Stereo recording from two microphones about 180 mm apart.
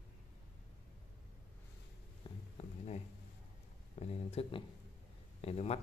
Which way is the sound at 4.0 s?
35° left (ahead or behind).